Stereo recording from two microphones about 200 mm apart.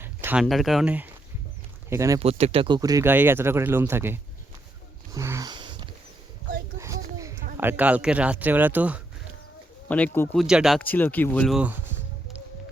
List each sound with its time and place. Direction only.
0.0 s a sound: 10° right (ahead or behind)
0.4 s speech: centre (ahead or behind); by 2.2 s 15° right (ahead or behind)
2.2 s speech: 30° right (ahead or behind); by 4.2 s 10° right (ahead or behind)
5.1 s a sound: 15° right (ahead or behind)
7.5 s speech: 10° right (ahead or behind)
9.9 s speech: 5° left (ahead or behind)
11.5 s speech: 5° right (ahead or behind)